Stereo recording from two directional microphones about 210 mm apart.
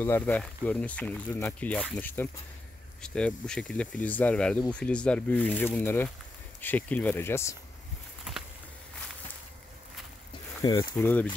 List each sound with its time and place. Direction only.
0.0 s speech: 10° left (ahead or behind)
10.6 s speech: 15° left (ahead or behind)